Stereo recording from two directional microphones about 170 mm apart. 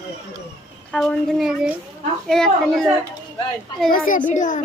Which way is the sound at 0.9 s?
5° left (ahead or behind).